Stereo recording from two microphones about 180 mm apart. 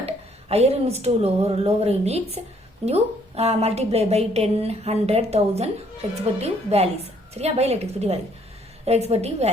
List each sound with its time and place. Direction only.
0.0 s a woman's voice: 35° right (ahead or behind)